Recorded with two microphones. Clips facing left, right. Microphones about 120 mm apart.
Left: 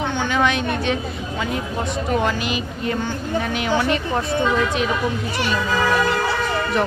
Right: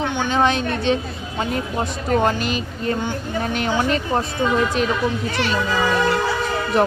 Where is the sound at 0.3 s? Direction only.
30° right (ahead or behind).